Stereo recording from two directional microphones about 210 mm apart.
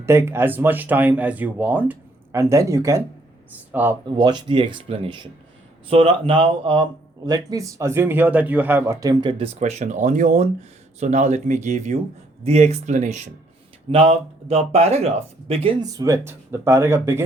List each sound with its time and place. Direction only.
0.0 s speech: 10° right (ahead or behind)
4.2 s speech: 20° right (ahead or behind)
9.6 s speech: 35° right (ahead or behind); by 17.2 s 10° right (ahead or behind)